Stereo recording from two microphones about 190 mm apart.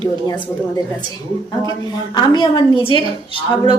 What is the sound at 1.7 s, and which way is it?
A woman's voice, 20° left (ahead or behind).